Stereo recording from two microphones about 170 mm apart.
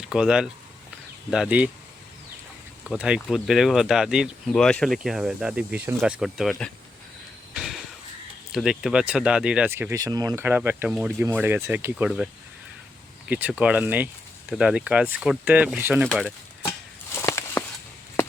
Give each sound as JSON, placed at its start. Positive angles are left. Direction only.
{"t": 0.0, "sound": "speech", "side_deg": -5}
{"t": 2.9, "sound": "speech", "side_deg": -5}
{"t": 7.5, "sound": "a sound", "side_deg": 0}
{"t": 8.5, "sound": "speech", "side_deg": -5}
{"t": 16.0, "sound": "speech", "side_deg": 5}
{"t": 16.6, "sound": "a sound", "side_deg": 15}